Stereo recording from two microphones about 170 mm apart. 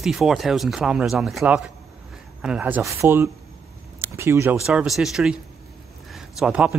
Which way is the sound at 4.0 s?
15° right (ahead or behind).